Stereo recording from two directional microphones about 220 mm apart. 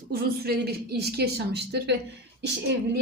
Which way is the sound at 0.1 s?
45° right (ahead or behind).